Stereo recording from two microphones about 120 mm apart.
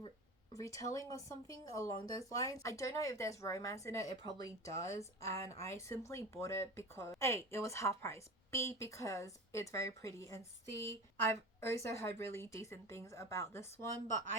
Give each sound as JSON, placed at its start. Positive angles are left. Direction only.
{"t": 0.5, "sound": "speech", "side_deg": 25}